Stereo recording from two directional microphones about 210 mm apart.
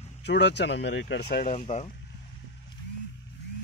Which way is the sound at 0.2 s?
55° left (ahead or behind).